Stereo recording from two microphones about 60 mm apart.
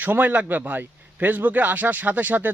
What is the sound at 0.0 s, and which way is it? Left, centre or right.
A man's voice, right.